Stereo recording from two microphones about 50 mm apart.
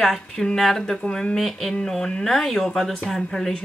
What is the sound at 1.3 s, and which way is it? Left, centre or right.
Speech, centre.